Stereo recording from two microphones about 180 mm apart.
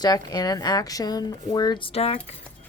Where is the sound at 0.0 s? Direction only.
20° left (ahead or behind).